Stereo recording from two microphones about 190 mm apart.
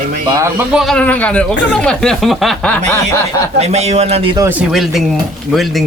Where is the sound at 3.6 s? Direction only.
35° right (ahead or behind).